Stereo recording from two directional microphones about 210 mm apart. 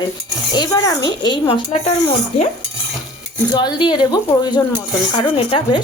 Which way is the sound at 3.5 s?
20° left (ahead or behind).